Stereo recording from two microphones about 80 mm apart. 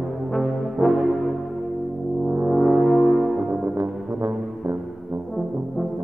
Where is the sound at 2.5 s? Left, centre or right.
Centre.